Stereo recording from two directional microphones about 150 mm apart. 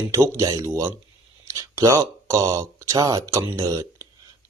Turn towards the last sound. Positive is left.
turn(degrees=-20)  # may be behind; listen again after turning